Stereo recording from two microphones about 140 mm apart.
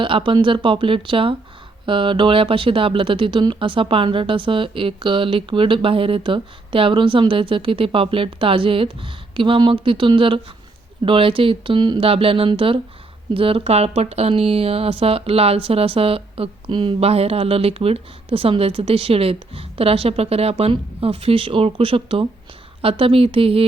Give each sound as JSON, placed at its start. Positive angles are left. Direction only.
{"t": 0.0, "sound": "speech", "side_deg": -40}